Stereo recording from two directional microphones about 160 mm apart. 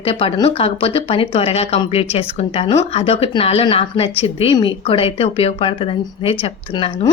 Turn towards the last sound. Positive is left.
turn(degrees=35)  # may be behind; listen again after turning